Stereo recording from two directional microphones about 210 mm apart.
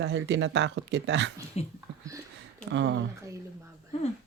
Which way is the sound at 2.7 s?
60° right (ahead or behind).